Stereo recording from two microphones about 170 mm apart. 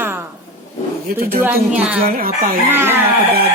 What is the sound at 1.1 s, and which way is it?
Speech, 60° right (ahead or behind).